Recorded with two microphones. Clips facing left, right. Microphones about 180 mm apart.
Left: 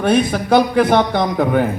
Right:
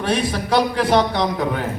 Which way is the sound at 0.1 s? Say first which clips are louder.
Left 5 dB; 50° left (ahead or behind).